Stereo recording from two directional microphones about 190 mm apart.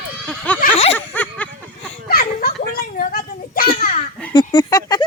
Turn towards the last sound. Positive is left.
turn(degrees=20)  # may be behind; listen again after turning